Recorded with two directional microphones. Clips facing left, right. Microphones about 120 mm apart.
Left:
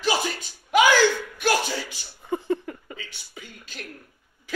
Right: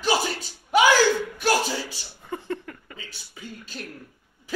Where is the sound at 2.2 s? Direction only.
20° left (ahead or behind).